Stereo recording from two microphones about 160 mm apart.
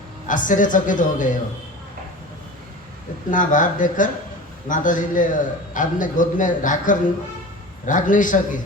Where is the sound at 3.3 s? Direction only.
55° left (ahead or behind).